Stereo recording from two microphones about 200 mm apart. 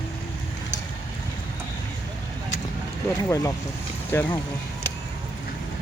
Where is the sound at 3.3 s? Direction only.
15° left (ahead or behind).